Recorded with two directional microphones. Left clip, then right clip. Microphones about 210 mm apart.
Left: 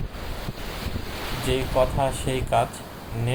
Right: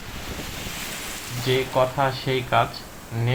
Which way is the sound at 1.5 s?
40° left (ahead or behind).